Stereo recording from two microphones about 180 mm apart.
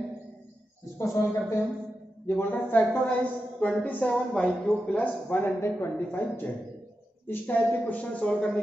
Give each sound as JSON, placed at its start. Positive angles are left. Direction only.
{"t": 0.9, "sound": "a woman's voice", "side_deg": 15}